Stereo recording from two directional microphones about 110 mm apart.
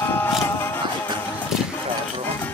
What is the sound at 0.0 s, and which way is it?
Music, 20° left (ahead or behind).